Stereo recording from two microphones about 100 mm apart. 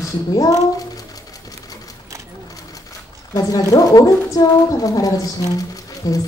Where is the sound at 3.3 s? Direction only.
35° left (ahead or behind).